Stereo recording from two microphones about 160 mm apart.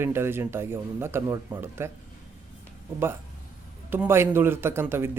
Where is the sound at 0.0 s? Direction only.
15° right (ahead or behind).